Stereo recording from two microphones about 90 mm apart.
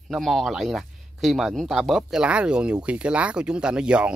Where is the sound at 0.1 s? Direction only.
Centre (ahead or behind).